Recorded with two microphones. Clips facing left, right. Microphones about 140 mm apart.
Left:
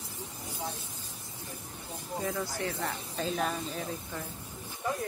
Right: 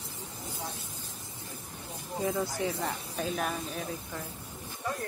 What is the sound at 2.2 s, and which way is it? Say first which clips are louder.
Speech: right 4 dB; 15° right (ahead or behind).